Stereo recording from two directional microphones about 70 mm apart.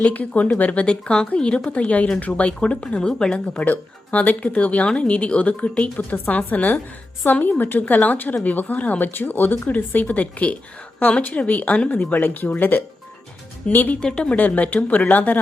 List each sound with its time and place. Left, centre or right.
0.0 s speech: left
14.0 s speech: centre
14.3 s speech: left